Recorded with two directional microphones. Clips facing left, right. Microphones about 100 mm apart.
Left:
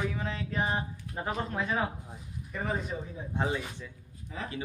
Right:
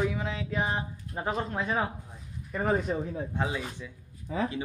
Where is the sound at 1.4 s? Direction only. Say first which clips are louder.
Right 1 dB; 25° right (ahead or behind).